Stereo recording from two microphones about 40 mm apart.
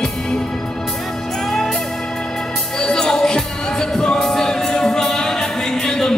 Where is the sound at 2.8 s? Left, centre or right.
Centre.